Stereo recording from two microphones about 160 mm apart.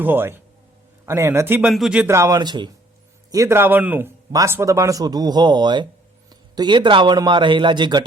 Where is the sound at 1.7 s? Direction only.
5° right (ahead or behind); by 8.1 s 30° right (ahead or behind).